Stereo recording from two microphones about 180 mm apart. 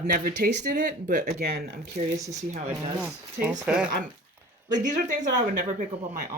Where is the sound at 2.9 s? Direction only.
5° right (ahead or behind).